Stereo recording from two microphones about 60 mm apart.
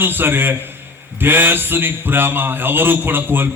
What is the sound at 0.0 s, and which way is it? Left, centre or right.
A man's voice, right.